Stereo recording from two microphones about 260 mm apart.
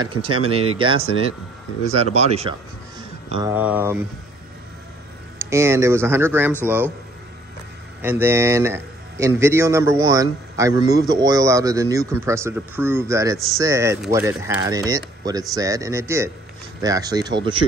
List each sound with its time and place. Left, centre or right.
0.0 s speech: centre
2.1 s speech: right
3.3 s speech: centre
5.4 s speech: centre
8.0 s speech: centre